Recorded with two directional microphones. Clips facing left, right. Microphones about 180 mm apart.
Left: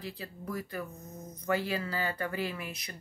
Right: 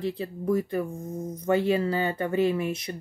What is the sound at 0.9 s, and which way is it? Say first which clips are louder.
Speech: right 12 dB; 50° right (ahead or behind).